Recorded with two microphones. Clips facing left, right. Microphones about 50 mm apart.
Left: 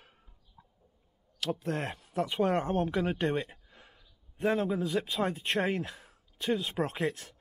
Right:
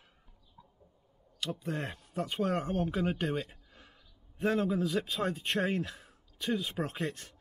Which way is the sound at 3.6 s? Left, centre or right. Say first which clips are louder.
Left 1 dB; left.